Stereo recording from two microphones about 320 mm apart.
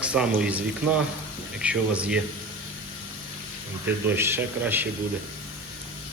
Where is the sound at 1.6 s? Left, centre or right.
Centre.